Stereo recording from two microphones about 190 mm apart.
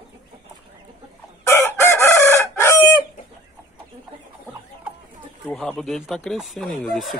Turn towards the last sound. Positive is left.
turn(degrees=0)  # may be behind; listen again after turning